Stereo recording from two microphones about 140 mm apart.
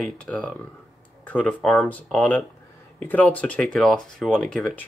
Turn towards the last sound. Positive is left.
turn(degrees=5)  # may be behind; listen again after turning